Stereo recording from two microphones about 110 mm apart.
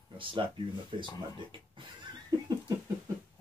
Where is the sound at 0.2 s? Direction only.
50° right (ahead or behind).